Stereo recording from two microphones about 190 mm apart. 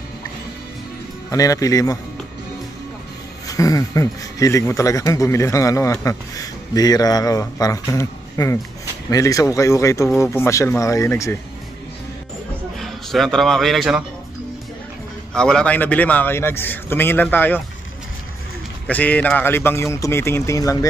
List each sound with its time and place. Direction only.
1.3 s speech: 15° left (ahead or behind)
3.4 s speech: 20° left (ahead or behind)
12.7 s a man's voice: centre (ahead or behind)
15.3 s speech: 5° left (ahead or behind)
18.9 s speech: 10° left (ahead or behind)